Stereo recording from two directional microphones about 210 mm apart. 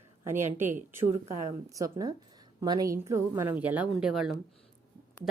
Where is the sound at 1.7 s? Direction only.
15° right (ahead or behind).